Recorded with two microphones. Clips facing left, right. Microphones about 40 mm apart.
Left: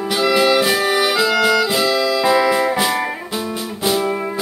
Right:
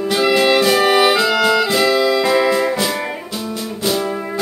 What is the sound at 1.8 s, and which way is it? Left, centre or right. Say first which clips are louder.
Music: right 2 dB; centre.